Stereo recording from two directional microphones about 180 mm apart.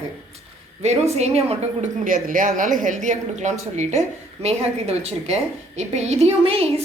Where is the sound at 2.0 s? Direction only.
50° right (ahead or behind).